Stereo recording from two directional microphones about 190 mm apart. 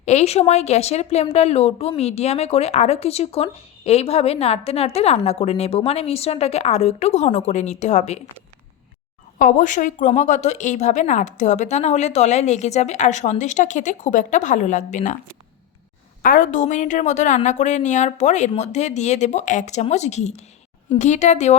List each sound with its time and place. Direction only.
0.0 s a woman's voice: 35° left (ahead or behind)
9.4 s a woman's voice: 45° left (ahead or behind)
16.2 s a woman's voice: 45° left (ahead or behind)